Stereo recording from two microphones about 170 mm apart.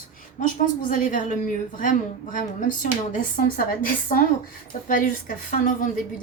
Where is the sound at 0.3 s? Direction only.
50° left (ahead or behind).